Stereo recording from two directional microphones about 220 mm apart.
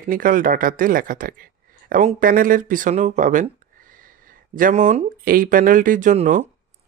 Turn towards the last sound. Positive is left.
turn(degrees=-35)  # may be behind; listen again after turning